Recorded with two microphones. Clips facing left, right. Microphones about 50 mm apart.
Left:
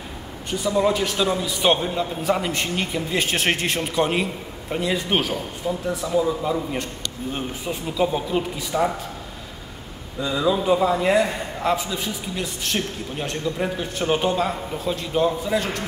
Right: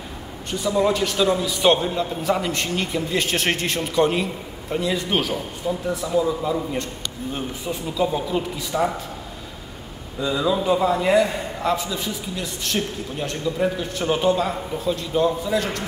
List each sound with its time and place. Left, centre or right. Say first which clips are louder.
0.5 s a man's voice: even; centre
5.3 s a man's voice: right 1 dB; centre
7.3 s a man's voice: right 1 dB; centre
10.2 s a man's voice: even; centre